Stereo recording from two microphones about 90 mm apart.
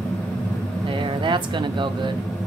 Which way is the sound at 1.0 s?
65° right (ahead or behind).